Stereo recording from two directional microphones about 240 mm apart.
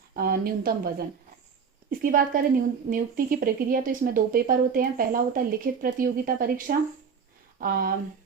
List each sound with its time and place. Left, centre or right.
0.2 s speech: right